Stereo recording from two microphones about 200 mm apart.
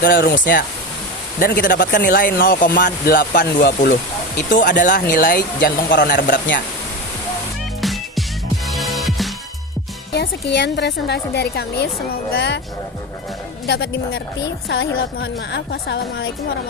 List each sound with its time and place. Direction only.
0.0 s speech: 55° left (ahead or behind)
7.8 s music: centre (ahead or behind)
10.2 s a woman's voice: 55° left (ahead or behind)
13.7 s a woman's voice: 55° left (ahead or behind)